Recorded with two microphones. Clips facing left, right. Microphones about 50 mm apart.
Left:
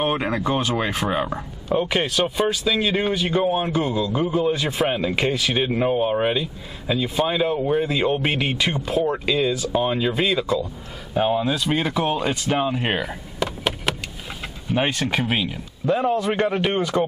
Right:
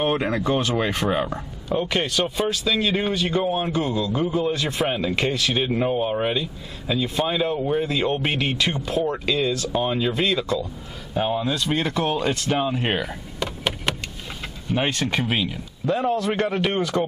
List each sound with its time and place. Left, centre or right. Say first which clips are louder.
0.0 s a man's voice: even; centre